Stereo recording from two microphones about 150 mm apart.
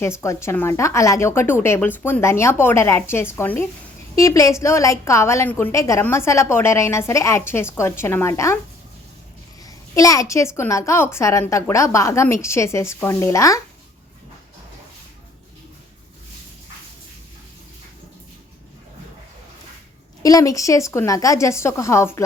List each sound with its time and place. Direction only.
0.2 s a woman's voice: 20° left (ahead or behind)
9.6 s a woman's voice: 25° left (ahead or behind)
20.2 s a woman's voice: 25° left (ahead or behind)